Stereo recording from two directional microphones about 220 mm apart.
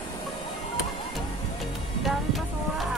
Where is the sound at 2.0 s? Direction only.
Centre (ahead or behind).